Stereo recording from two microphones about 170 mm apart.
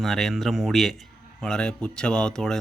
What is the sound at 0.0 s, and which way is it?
A man's voice, centre (ahead or behind).